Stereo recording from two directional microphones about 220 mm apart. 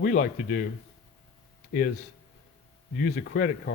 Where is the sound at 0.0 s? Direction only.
40° left (ahead or behind).